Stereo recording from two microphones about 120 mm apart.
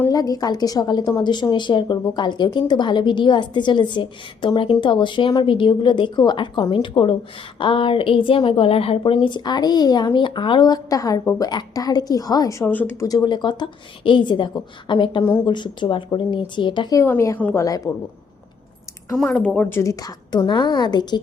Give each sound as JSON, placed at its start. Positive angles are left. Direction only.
{"t": 0.1, "sound": "a woman's voice", "side_deg": 30}
{"t": 13.1, "sound": "a woman's voice", "side_deg": 35}
{"t": 15.2, "sound": "a woman's voice", "side_deg": 20}
{"t": 15.4, "sound": "a woman's voice", "side_deg": 40}
{"t": 16.9, "sound": "a woman's voice", "side_deg": 20}
{"t": 19.1, "sound": "speech", "side_deg": 5}
{"t": 19.8, "sound": "a woman's voice", "side_deg": 30}